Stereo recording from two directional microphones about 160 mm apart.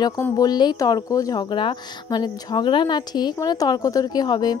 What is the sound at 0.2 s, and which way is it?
Speech, 25° left (ahead or behind).